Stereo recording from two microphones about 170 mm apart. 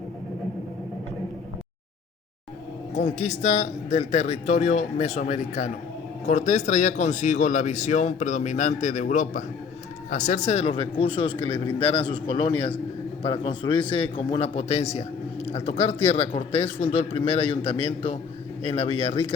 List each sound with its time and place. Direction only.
2.9 s a man's voice: 40° left (ahead or behind)